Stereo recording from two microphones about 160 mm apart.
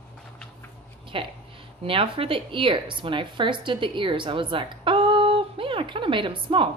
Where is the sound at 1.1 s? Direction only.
35° right (ahead or behind).